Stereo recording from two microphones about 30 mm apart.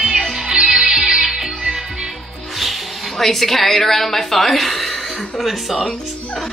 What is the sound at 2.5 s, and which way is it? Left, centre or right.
Speech, centre.